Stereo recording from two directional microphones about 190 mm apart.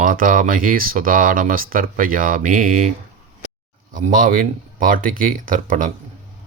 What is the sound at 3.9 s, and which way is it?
Speech, 45° right (ahead or behind).